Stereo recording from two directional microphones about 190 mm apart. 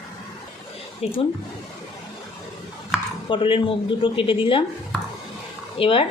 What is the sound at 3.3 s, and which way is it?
A woman's voice, 25° left (ahead or behind).